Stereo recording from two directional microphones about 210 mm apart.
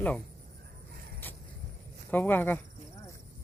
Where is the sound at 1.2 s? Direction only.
10° left (ahead or behind).